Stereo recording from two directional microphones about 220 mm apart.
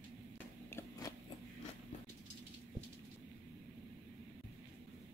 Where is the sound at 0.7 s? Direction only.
10° left (ahead or behind).